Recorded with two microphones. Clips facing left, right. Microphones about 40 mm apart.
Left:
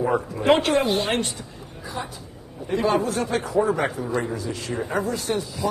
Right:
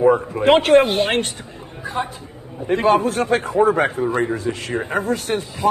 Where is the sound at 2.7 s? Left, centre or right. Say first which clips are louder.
Right 5 dB; right.